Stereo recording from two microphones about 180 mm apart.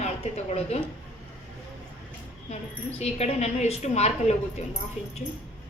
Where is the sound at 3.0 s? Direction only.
35° left (ahead or behind).